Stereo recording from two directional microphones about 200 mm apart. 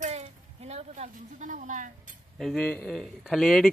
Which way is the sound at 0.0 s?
35° right (ahead or behind).